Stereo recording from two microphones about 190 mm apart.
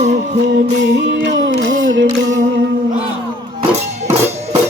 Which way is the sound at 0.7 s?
65° right (ahead or behind).